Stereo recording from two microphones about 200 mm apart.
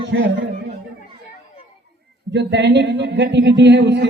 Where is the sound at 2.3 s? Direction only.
60° right (ahead or behind).